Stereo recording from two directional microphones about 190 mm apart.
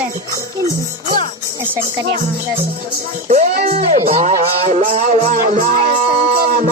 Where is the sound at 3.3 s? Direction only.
40° right (ahead or behind).